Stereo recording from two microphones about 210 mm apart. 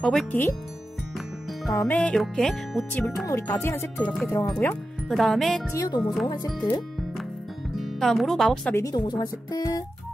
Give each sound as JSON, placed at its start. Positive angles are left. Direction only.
{"t": 0.0, "sound": "speech", "side_deg": 5}
{"t": 1.7, "sound": "speech", "side_deg": 10}
{"t": 5.7, "sound": "speech", "side_deg": 15}
{"t": 7.7, "sound": "speech", "side_deg": 0}
{"t": 8.7, "sound": "speech", "side_deg": 15}